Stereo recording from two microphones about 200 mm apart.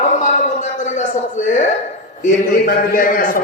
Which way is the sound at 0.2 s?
40° left (ahead or behind).